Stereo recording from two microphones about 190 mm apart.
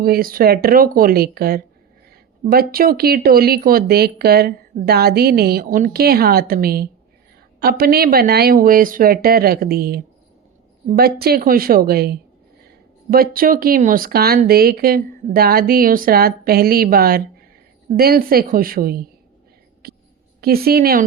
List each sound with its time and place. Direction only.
0.0 s speech: 50° right (ahead or behind)
19.8 s a sound: 55° right (ahead or behind)
20.4 s speech: 55° right (ahead or behind)